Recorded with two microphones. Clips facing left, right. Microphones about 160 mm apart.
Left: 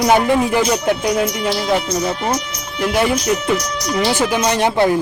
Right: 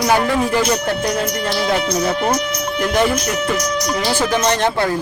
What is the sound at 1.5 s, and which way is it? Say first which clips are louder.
Speech: even; 65° right (ahead or behind).